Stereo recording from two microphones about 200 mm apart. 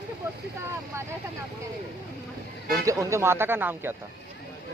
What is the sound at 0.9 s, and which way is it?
Speech, 15° right (ahead or behind).